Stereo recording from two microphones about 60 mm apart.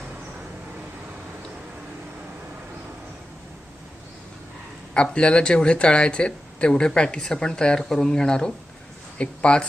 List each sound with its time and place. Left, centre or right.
4.9 s speech: centre